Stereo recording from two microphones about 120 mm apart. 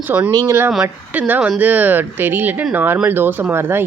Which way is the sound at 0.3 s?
30° right (ahead or behind).